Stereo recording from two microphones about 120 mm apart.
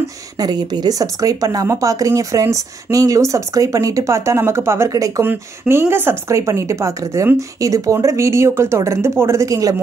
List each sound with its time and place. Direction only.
0.4 s speech: 35° right (ahead or behind)